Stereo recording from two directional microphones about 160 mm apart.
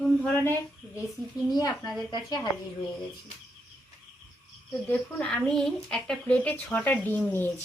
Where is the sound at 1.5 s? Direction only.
25° left (ahead or behind).